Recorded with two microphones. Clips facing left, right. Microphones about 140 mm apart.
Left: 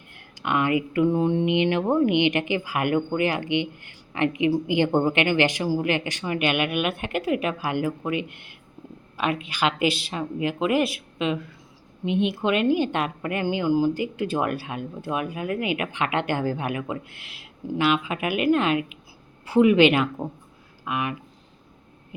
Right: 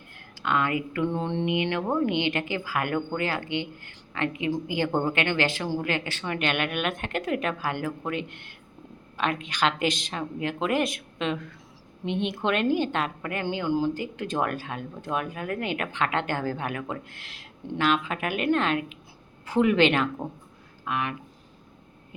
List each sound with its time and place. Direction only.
0.3 s a woman's voice: 15° left (ahead or behind)